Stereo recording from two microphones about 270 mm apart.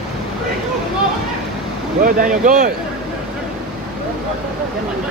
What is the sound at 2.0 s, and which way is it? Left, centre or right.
Speech, right.